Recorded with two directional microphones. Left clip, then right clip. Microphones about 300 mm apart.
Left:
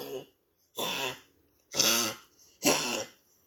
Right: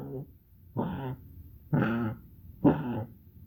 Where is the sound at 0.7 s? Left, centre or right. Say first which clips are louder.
Left 4 dB; centre.